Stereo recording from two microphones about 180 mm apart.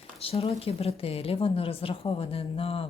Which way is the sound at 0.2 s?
35° left (ahead or behind).